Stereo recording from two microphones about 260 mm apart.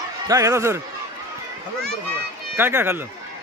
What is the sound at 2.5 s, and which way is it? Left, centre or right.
Speech, centre.